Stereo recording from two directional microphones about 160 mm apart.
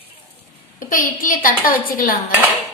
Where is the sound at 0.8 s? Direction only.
55° left (ahead or behind).